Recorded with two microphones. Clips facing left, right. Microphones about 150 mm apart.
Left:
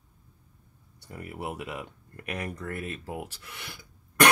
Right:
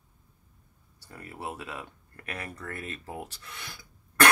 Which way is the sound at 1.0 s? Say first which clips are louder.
Left 3 dB; 20° left (ahead or behind).